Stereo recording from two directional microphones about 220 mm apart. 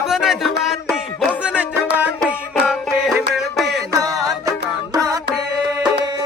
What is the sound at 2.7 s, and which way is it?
Music, centre (ahead or behind).